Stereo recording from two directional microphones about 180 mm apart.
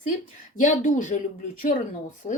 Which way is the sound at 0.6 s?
45° left (ahead or behind).